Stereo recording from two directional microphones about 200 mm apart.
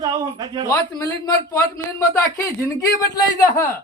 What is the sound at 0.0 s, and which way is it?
Speech, 20° right (ahead or behind).